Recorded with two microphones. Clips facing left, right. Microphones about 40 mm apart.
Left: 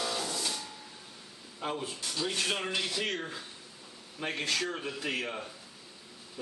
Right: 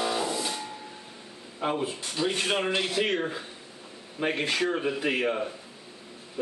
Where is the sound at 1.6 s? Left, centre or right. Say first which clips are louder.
Right 7 dB; right.